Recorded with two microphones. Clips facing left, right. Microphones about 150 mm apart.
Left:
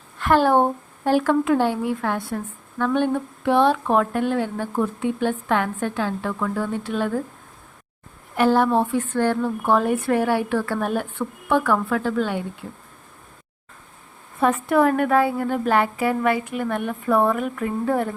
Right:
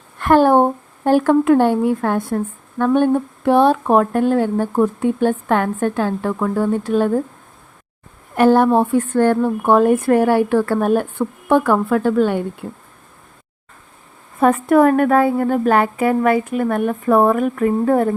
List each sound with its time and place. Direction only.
0.2 s a woman's voice: 50° right (ahead or behind)
8.4 s a woman's voice: 50° right (ahead or behind)
14.3 s a woman's voice: 50° right (ahead or behind)